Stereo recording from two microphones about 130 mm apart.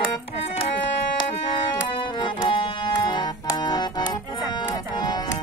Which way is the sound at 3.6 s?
35° left (ahead or behind).